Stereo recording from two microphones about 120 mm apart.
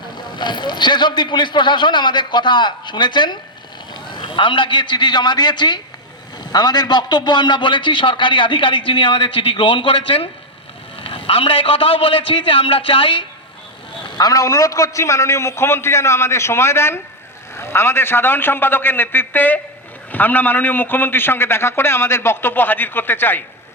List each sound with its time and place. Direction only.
0.3 s a man's voice: 40° left (ahead or behind)
14.0 s a man's voice: 35° left (ahead or behind); by 23.4 s 15° left (ahead or behind)